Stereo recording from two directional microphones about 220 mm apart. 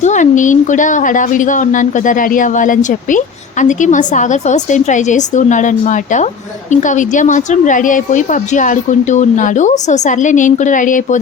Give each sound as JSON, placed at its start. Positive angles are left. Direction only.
{"t": 0.0, "sound": "a woman's voice", "side_deg": 35}